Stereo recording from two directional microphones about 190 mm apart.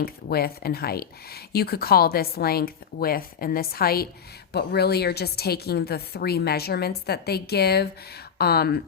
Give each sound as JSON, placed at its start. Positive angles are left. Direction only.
{"t": 0.0, "sound": "a woman's voice", "side_deg": 55}